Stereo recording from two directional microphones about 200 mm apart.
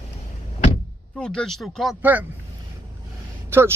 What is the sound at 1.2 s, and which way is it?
Speech, 5° left (ahead or behind).